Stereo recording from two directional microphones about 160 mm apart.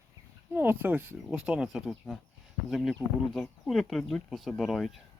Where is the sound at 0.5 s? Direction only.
15° right (ahead or behind).